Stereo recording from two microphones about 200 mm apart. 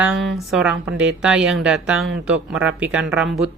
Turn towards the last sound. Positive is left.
turn(degrees=-5)  # may be behind; listen again after turning